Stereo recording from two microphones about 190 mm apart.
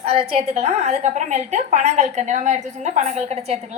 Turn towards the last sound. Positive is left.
turn(degrees=-35)  # may be behind; listen again after turning